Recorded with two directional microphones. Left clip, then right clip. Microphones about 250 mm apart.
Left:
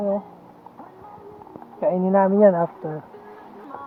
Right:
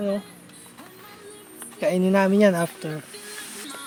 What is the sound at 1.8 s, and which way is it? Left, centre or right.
Speech, right.